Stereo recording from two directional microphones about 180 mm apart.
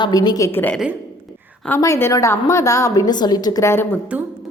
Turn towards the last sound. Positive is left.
turn(degrees=15)  # may be behind; listen again after turning